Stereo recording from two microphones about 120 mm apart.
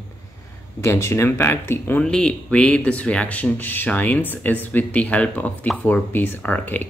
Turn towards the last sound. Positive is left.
turn(degrees=15)  # may be behind; listen again after turning